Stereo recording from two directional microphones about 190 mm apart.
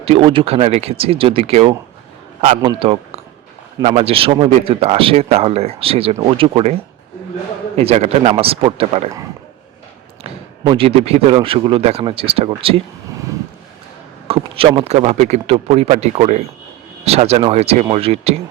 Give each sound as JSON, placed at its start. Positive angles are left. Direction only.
{"t": 0.0, "sound": "speech", "side_deg": -30}
{"t": 7.8, "sound": "speech", "side_deg": -35}
{"t": 10.6, "sound": "speech", "side_deg": -25}
{"t": 14.3, "sound": "speech", "side_deg": -30}